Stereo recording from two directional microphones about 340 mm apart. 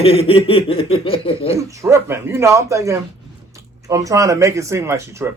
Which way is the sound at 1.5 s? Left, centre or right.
Centre.